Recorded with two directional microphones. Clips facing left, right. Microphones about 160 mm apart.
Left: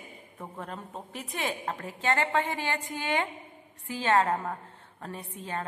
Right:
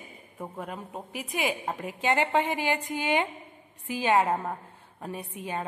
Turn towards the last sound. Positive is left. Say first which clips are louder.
# right 2 dB
turn(degrees=-15)  # may be behind; listen again after turning